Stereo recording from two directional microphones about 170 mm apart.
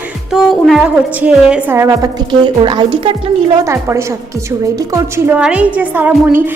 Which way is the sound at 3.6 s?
15° right (ahead or behind).